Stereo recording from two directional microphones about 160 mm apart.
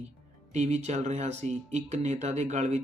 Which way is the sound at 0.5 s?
45° right (ahead or behind).